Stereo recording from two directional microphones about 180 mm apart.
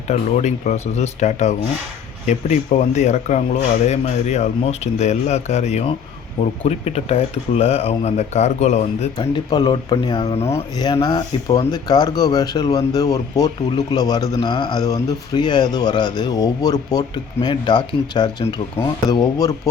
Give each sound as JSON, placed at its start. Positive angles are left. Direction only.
{"t": 0.1, "sound": "speech", "side_deg": 40}
{"t": 9.1, "sound": "a man's voice", "side_deg": 20}